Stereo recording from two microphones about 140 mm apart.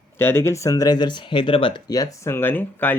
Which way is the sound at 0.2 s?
15° left (ahead or behind).